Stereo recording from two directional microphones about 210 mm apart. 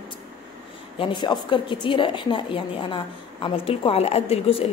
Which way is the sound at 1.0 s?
20° left (ahead or behind).